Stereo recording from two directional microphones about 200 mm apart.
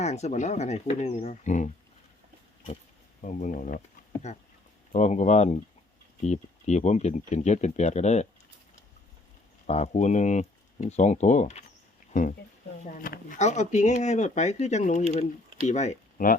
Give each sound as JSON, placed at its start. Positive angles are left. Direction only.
{"t": 0.0, "sound": "speech", "side_deg": 35}
{"t": 3.4, "sound": "speech", "side_deg": 40}
{"t": 9.6, "sound": "speech", "side_deg": 35}
{"t": 12.8, "sound": "speech", "side_deg": 45}